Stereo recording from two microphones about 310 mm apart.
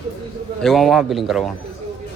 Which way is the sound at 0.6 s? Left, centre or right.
Centre.